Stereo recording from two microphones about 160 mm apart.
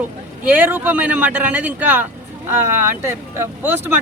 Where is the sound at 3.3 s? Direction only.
15° right (ahead or behind).